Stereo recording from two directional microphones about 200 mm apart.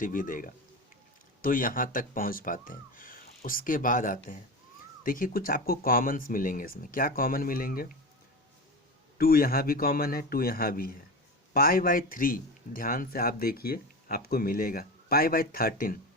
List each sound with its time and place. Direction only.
0.0 s speech: 45° left (ahead or behind)
9.1 s speech: 50° left (ahead or behind)